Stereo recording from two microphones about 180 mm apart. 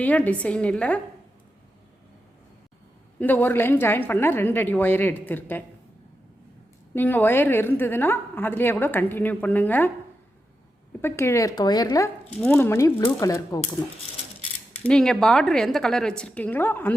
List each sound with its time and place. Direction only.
0.0 s a woman's voice: 10° left (ahead or behind)
3.2 s a woman's voice: 10° left (ahead or behind)
6.9 s a woman's voice: 10° left (ahead or behind)
11.0 s a woman's voice: 15° left (ahead or behind)
14.8 s speech: 5° left (ahead or behind)